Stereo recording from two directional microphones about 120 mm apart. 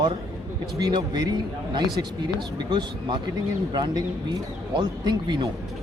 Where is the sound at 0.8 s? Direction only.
35° right (ahead or behind).